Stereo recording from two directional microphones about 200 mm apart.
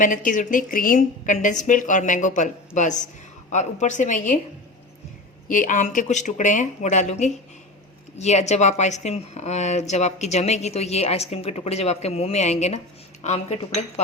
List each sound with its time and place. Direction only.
0.0 s speech: 40° left (ahead or behind)
5.5 s speech: 40° left (ahead or behind)